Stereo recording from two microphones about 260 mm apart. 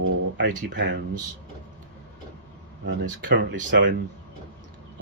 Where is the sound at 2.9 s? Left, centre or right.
Right.